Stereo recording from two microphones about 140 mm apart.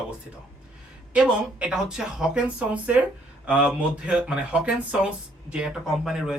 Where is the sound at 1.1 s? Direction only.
10° right (ahead or behind).